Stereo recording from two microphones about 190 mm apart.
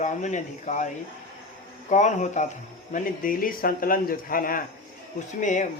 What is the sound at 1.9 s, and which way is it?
Speech, 40° left (ahead or behind).